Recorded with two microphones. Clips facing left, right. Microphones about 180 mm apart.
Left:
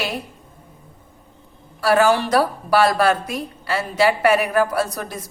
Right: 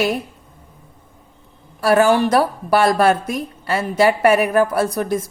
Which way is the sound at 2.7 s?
50° right (ahead or behind).